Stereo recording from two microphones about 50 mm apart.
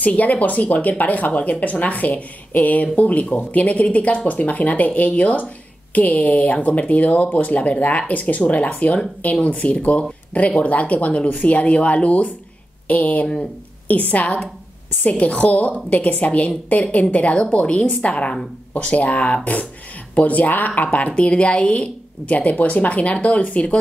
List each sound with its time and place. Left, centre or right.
0.0 s speech: left